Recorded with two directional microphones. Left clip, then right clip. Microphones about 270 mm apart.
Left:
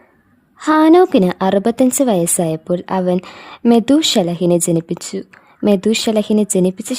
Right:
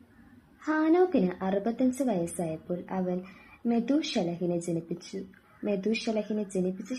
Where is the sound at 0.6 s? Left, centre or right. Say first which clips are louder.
Left 15 dB; left.